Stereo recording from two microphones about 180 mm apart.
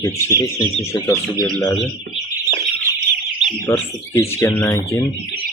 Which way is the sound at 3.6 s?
15° left (ahead or behind).